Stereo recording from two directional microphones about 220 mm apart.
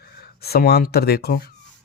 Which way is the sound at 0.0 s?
45° left (ahead or behind).